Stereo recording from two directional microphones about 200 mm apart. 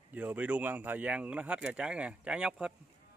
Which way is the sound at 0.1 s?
10° right (ahead or behind).